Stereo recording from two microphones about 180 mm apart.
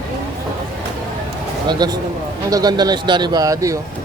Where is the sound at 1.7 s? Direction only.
20° right (ahead or behind).